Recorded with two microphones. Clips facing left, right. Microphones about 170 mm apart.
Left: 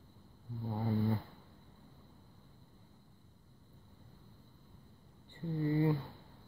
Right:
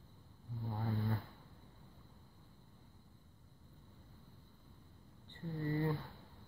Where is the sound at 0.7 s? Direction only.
20° left (ahead or behind).